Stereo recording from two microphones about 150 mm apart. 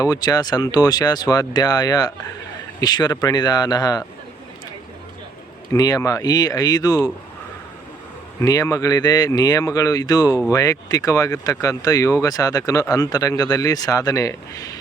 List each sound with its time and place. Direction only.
0.0 s speech: 25° left (ahead or behind)
5.7 s speech: 25° left (ahead or behind)
8.4 s speech: 25° left (ahead or behind)